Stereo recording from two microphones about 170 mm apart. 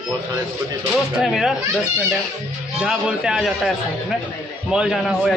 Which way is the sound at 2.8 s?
5° right (ahead or behind).